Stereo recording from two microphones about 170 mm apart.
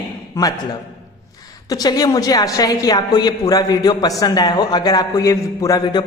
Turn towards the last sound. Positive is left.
turn(degrees=25)  # may be behind; listen again after turning